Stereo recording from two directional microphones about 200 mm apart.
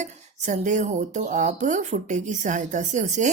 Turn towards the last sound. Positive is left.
turn(degrees=-35)  # may be behind; listen again after turning